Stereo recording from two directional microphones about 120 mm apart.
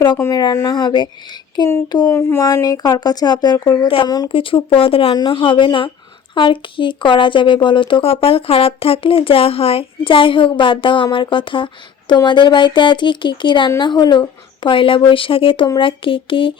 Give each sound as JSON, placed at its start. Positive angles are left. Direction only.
{"t": 0.2, "sound": "speech", "side_deg": 30}
{"t": 2.1, "sound": "speech", "side_deg": 25}
{"t": 3.8, "sound": "speech", "side_deg": 45}